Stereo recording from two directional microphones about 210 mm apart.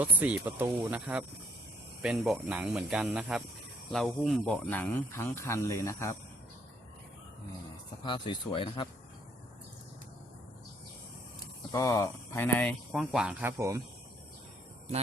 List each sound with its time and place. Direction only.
0.0 s speech: 10° right (ahead or behind); by 6.1 s 15° left (ahead or behind)
8.0 s speech: 20° left (ahead or behind)
11.7 s speech: 15° left (ahead or behind); by 13.8 s 15° right (ahead or behind)